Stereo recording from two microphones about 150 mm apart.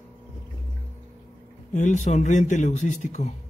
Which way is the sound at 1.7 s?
55° left (ahead or behind).